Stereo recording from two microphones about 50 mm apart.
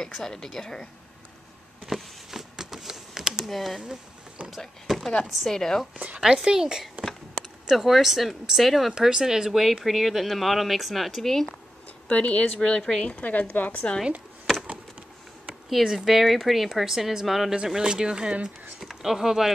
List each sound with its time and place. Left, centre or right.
0.0 s speech: centre
1.9 s a sound: centre
2.9 s computer keyboard: centre
3.4 s speech: centre
5.9 s a woman's voice: right
6.2 s speech: centre
12.1 s a woman's voice: left
12.5 s speech: centre
13.1 s a woman's voice: left
15.7 s speech: centre
18.8 s speech: centre